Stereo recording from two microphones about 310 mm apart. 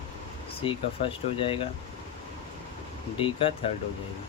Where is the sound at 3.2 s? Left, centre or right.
Centre.